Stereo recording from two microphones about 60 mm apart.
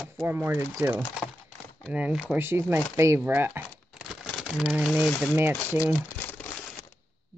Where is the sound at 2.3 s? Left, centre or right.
Right.